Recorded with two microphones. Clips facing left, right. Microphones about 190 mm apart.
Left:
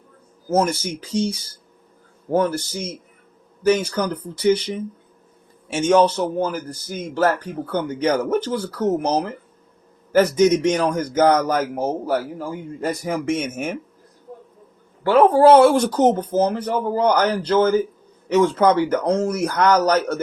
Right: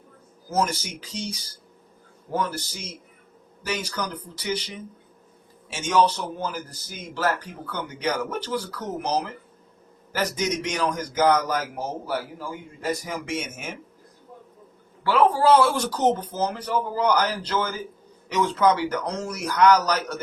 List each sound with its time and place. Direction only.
0.5 s a man's voice: 55° left (ahead or behind)
15.0 s a man's voice: 50° left (ahead or behind)